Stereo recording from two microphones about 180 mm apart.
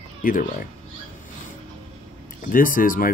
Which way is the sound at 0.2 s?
50° left (ahead or behind).